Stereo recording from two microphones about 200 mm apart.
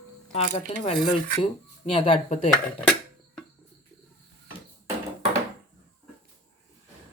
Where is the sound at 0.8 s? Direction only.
25° left (ahead or behind).